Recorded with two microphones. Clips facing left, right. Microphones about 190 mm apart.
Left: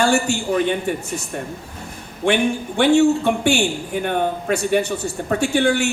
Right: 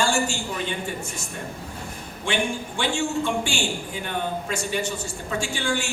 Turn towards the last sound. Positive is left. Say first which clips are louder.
# left 9 dB
turn(degrees=60)  # may be behind; listen again after turning